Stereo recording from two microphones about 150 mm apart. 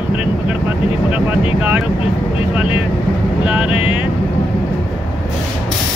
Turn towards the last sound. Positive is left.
turn(degrees=35)  # may be behind; listen again after turning